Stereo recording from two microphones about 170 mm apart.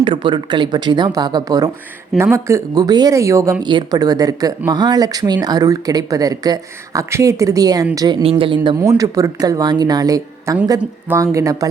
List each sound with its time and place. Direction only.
0.0 s speech: 30° right (ahead or behind)
8.2 s a woman's voice: 35° right (ahead or behind)
8.7 s speech: 15° right (ahead or behind)